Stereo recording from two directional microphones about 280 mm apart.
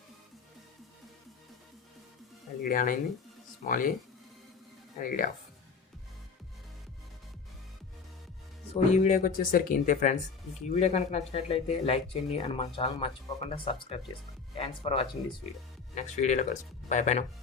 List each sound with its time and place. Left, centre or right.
2.6 s speech: left
4.9 s speech: left
8.7 s speech: left